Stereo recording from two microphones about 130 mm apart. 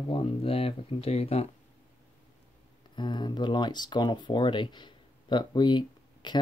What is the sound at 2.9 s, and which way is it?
Speech, 35° left (ahead or behind).